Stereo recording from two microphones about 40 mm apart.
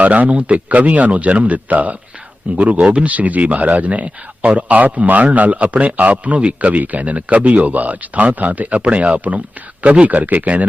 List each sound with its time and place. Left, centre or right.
0.0 s speech: right